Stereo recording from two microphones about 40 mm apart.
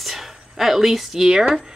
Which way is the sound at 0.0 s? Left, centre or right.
Centre.